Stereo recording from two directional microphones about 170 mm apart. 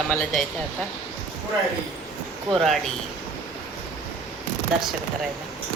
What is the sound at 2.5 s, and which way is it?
Speech, centre (ahead or behind).